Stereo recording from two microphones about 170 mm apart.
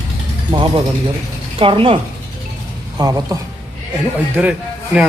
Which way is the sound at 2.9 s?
20° right (ahead or behind).